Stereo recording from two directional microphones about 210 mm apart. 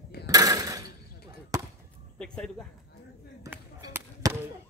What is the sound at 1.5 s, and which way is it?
Basketball bounce, 15° right (ahead or behind).